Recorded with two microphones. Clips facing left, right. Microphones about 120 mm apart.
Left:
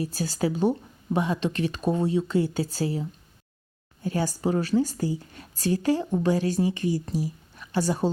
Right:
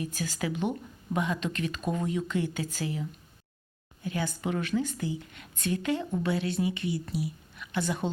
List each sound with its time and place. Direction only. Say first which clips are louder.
0.0 s speech: left 6 dB; 35° left (ahead or behind)